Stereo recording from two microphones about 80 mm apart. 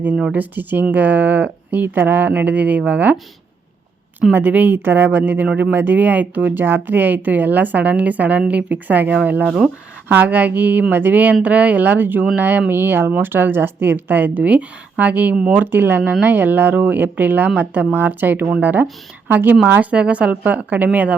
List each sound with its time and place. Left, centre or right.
0.2 s speech: centre
4.3 s speech: right
15.6 s speech: right